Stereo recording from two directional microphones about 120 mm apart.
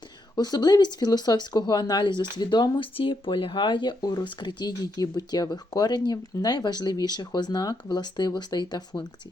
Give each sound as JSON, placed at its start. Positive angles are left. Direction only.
{"t": 0.3, "sound": "speech", "side_deg": 35}